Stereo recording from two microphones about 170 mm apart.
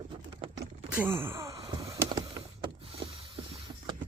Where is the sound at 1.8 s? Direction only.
35° right (ahead or behind).